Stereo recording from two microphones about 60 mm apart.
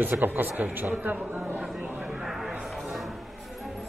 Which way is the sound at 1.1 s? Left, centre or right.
Centre.